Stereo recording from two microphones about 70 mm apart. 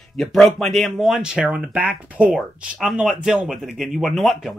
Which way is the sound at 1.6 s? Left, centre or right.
Right.